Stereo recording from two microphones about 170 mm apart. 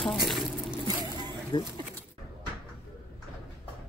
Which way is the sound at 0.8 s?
25° right (ahead or behind).